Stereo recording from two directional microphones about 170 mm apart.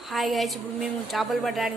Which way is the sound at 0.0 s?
Centre (ahead or behind).